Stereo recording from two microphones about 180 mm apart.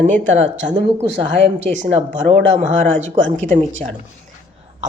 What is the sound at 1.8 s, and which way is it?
Speech, 40° right (ahead or behind).